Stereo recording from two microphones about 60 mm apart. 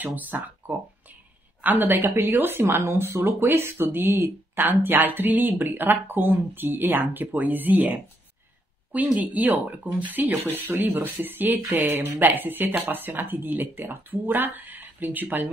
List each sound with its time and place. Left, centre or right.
0.0 s speech: right